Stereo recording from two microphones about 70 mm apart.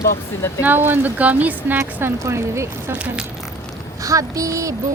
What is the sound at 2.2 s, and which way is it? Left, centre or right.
Speech, right.